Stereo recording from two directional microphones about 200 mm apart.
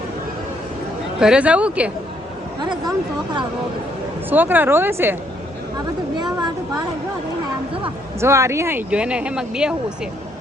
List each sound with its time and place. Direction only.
1.2 s speech: 5° right (ahead or behind)
2.6 s speech: 20° right (ahead or behind)
4.3 s speech: 10° right (ahead or behind)
6.1 s a sound: 20° right (ahead or behind)
8.2 s speech: 15° right (ahead or behind)